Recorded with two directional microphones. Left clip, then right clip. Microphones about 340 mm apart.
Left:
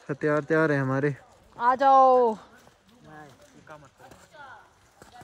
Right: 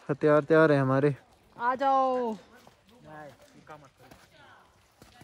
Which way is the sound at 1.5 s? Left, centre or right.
Left.